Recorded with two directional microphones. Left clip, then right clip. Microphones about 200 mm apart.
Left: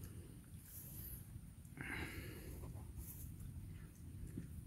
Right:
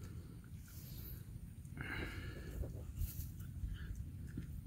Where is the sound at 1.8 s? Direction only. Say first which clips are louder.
Right 2 dB; 10° left (ahead or behind).